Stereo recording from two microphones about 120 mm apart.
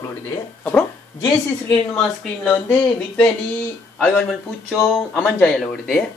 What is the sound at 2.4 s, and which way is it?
Speech, 10° left (ahead or behind).